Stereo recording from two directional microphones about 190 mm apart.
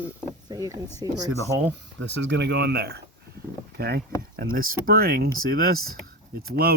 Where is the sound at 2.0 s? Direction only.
70° right (ahead or behind).